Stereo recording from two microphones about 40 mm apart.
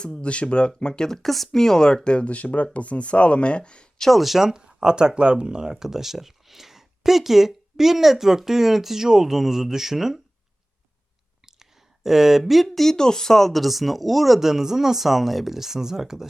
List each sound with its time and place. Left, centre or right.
0.0 s speech: left
4.0 s speech: centre
4.4 s speech: centre
11.4 s a sound: centre
12.9 s speech: centre